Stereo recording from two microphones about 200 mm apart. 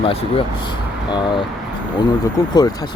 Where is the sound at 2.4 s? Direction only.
15° left (ahead or behind).